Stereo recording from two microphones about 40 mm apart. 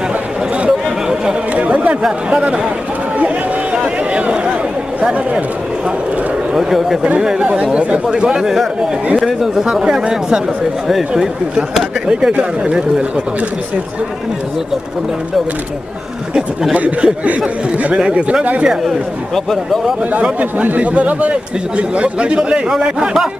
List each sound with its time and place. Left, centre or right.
1.5 s chatter: right
3.7 s a sound: right
6.5 s speech: centre
7.2 s speech: right
7.4 s speech: right
8.4 s speech: centre
12.1 s speech: right
16.7 s a man's voice: right
17.8 s speech: right
18.6 s speech: centre
19.3 s speech: centre
20.2 s a man's voice: right; by 23.2 s centre